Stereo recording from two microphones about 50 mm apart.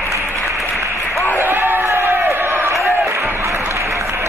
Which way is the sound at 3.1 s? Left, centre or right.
Right.